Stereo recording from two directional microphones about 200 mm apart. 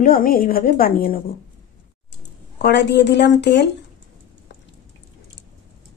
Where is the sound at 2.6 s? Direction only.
60° left (ahead or behind).